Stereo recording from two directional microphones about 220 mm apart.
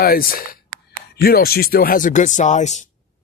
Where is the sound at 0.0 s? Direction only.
40° left (ahead or behind).